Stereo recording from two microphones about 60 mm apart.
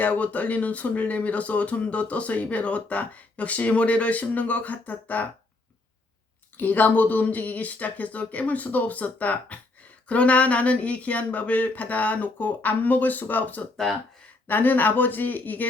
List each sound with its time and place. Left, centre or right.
0.0 s speech: left
6.6 s speech: left